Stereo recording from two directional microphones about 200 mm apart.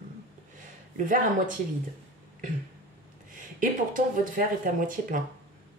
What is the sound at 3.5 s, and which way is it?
Speech, 40° right (ahead or behind).